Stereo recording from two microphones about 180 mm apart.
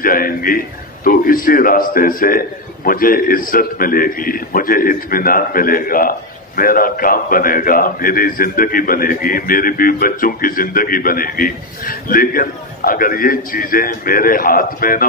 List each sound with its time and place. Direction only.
0.0 s a man's voice: 50° left (ahead or behind)